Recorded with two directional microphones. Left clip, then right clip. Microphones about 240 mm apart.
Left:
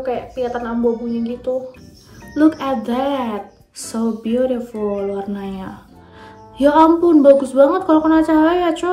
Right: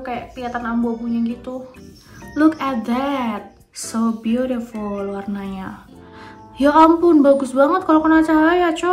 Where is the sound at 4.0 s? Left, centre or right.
Right.